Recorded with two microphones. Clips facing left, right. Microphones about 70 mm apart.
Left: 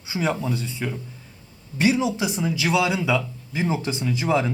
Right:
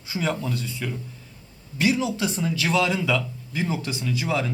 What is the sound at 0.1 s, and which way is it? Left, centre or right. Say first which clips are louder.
Speech: left 2 dB; centre.